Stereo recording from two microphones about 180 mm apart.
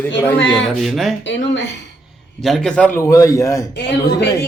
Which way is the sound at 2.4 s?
Centre (ahead or behind).